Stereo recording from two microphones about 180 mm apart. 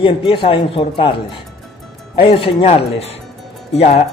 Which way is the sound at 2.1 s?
30° left (ahead or behind).